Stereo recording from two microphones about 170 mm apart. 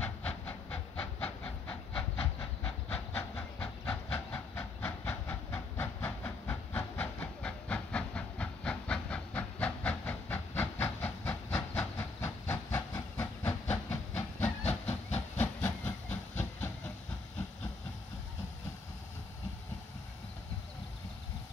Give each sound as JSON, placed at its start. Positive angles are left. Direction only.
{"t": 0.0, "sound": "train", "side_deg": 10}
{"t": 13.7, "sound": "hiss", "side_deg": 10}
{"t": 14.6, "sound": "hiss", "side_deg": 40}
{"t": 15.3, "sound": "hiss", "side_deg": 10}
{"t": 15.8, "sound": "hiss", "side_deg": 45}